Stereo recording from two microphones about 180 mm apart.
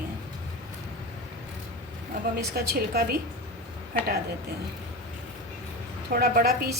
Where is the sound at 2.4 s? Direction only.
60° right (ahead or behind).